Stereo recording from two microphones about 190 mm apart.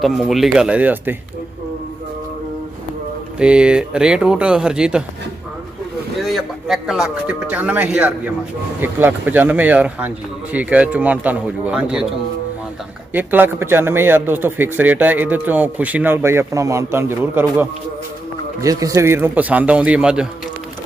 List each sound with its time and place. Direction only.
0.0 s speech: centre (ahead or behind)
3.3 s speech: 5° right (ahead or behind)
6.2 s a man's voice: centre (ahead or behind)
13.1 s a man's voice: 10° right (ahead or behind)
18.6 s a man's voice: 15° right (ahead or behind)